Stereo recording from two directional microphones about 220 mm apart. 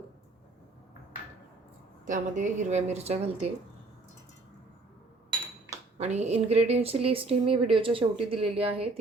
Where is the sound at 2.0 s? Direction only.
35° right (ahead or behind).